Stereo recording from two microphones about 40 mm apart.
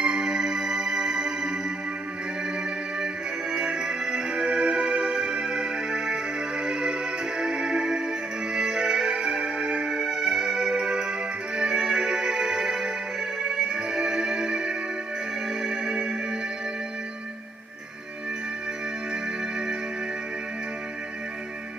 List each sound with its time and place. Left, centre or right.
0.0 s music: centre
3.5 s music: centre